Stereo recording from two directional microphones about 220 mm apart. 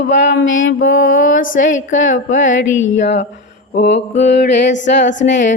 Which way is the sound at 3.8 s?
50° left (ahead or behind).